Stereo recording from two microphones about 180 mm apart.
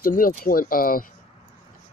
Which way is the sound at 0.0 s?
50° left (ahead or behind).